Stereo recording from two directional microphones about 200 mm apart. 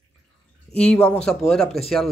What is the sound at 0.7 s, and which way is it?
Speech, 5° left (ahead or behind).